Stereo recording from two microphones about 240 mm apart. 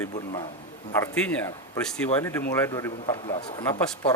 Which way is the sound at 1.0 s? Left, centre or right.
Centre.